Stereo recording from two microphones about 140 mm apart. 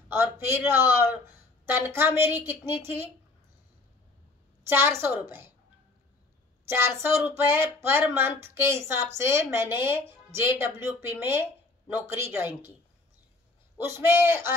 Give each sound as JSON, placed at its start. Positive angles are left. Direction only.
{"t": 0.1, "sound": "speech", "side_deg": -15}
{"t": 4.6, "sound": "speech", "side_deg": -15}
{"t": 6.7, "sound": "speech", "side_deg": -15}
{"t": 13.7, "sound": "speech", "side_deg": -15}